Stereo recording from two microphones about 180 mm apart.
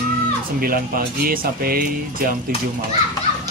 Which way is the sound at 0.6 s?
55° right (ahead or behind).